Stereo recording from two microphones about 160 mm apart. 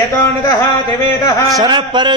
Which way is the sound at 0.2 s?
20° left (ahead or behind).